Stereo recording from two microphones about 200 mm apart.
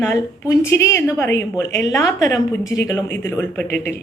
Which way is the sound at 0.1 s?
15° left (ahead or behind).